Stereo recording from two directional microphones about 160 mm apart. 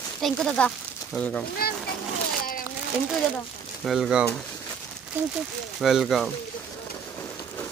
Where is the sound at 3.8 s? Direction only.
Centre (ahead or behind).